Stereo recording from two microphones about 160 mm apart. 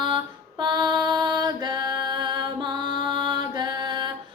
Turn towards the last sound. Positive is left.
turn(degrees=-30)  # may be behind; listen again after turning